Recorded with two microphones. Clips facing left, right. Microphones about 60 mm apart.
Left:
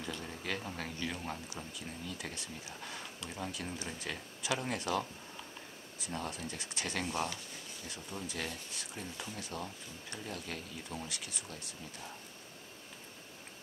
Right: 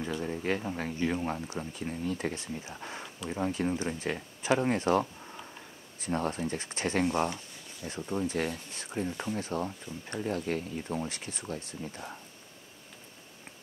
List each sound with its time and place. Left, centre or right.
0.0 s speech: right